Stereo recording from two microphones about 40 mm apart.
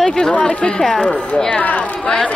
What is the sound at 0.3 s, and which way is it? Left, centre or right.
Speech, left.